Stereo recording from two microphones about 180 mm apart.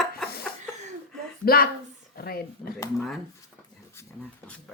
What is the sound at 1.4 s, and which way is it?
A woman's voice, 55° left (ahead or behind).